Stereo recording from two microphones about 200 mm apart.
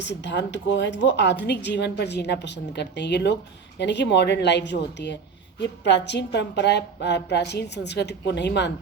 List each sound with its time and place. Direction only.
0.0 s speech: 60° left (ahead or behind)